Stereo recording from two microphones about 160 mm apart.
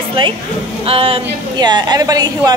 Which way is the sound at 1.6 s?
25° right (ahead or behind).